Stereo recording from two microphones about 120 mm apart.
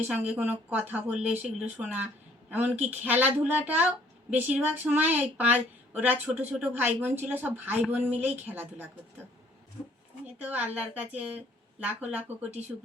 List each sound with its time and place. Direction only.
0.1 s a woman's voice: 15° right (ahead or behind)
10.3 s a woman's voice: 10° right (ahead or behind)